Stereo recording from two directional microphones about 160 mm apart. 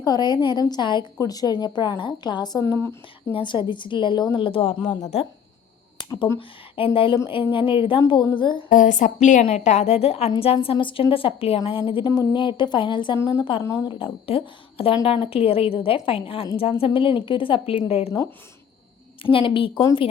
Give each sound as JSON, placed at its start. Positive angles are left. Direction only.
{"t": 0.0, "sound": "a woman's voice", "side_deg": 25}
{"t": 3.3, "sound": "a woman's voice", "side_deg": 30}
{"t": 6.0, "sound": "a sound", "side_deg": 30}
{"t": 6.7, "sound": "a woman's voice", "side_deg": 35}
{"t": 8.7, "sound": "a woman's voice", "side_deg": 50}
{"t": 12.0, "sound": "a woman's voice", "side_deg": 20}
{"t": 19.2, "sound": "a woman's voice", "side_deg": 35}